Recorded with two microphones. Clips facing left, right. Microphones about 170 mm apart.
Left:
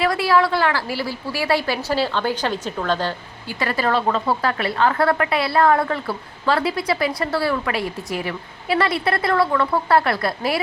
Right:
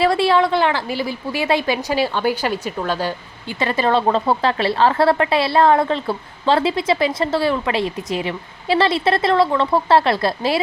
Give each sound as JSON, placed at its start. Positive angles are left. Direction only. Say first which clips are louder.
{"t": 0.0, "sound": "a woman's voice", "louder": "right 3 dB", "side_deg": -25}
{"t": 3.6, "sound": "a woman's voice", "louder": "right 3 dB", "side_deg": -20}